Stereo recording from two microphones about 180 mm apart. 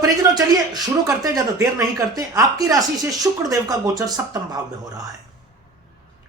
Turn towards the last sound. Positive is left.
turn(degrees=-20)  # may be behind; listen again after turning